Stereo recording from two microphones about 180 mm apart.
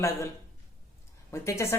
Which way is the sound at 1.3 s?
15° left (ahead or behind).